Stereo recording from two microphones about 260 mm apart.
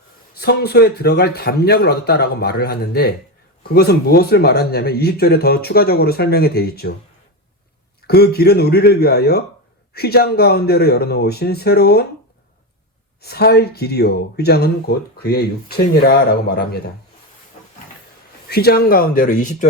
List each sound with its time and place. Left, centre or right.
0.3 s speech: left
8.0 s speech: left
13.2 s speech: left
18.4 s speech: left